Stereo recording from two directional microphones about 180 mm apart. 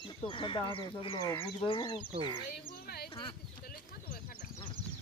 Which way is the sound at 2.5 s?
60° left (ahead or behind).